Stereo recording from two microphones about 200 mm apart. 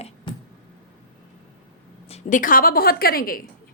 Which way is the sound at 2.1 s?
35° left (ahead or behind).